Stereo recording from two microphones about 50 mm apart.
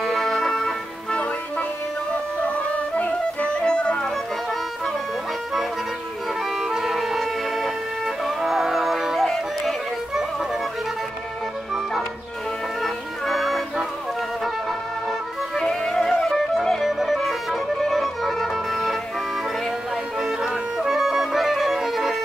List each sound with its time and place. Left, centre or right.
0.0 s music: centre
3.0 s music: left
3.6 s music: centre
6.6 s music: centre
12.8 s music: centre
15.5 s music: centre
20.2 s clarinet: centre